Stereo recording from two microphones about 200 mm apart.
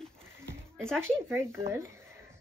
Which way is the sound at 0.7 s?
5° left (ahead or behind).